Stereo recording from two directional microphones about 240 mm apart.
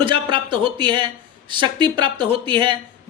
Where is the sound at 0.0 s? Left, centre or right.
Right.